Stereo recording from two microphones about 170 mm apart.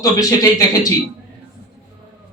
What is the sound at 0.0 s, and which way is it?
Speech, 20° left (ahead or behind).